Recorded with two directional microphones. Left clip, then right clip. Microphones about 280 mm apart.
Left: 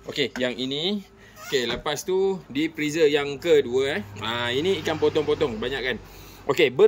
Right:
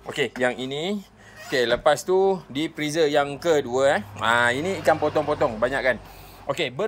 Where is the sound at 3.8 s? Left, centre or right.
Right.